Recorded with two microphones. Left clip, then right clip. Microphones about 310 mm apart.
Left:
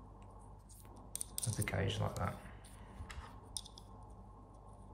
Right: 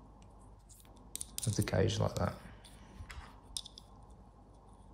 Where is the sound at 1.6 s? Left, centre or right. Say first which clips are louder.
Right 6 dB; centre.